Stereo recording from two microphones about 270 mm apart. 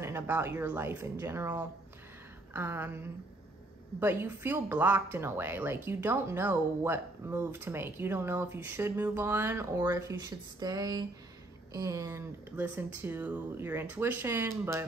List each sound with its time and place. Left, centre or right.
0.0 s speech: centre